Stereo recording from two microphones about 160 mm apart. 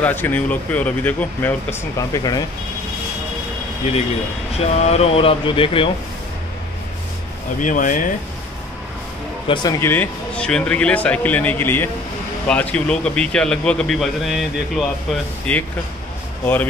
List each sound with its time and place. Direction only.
0.0 s speech: 10° left (ahead or behind)
4.6 s speech: 40° left (ahead or behind)
7.6 s speech: 55° left (ahead or behind)
9.5 s speech: 30° left (ahead or behind)
9.8 s a man's voice: 15° left (ahead or behind)